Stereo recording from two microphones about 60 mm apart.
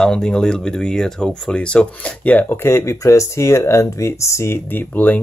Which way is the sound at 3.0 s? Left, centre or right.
Left.